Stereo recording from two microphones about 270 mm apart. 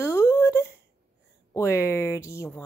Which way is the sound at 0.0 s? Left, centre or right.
Centre.